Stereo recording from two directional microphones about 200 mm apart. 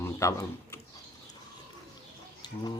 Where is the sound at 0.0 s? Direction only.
15° left (ahead or behind).